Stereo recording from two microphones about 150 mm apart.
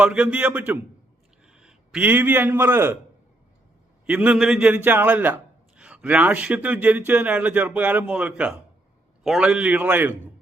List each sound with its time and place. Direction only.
0.0 s a man's voice: 5° right (ahead or behind)
4.0 s a man's voice: 10° right (ahead or behind)